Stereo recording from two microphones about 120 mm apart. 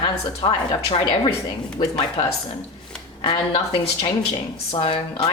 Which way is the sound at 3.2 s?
50° left (ahead or behind).